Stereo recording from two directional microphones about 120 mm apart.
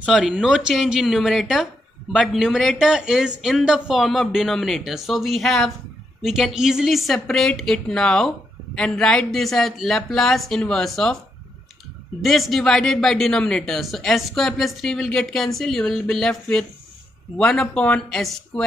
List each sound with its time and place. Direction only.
0.0 s speech: 5° right (ahead or behind)
12.2 s speech: centre (ahead or behind)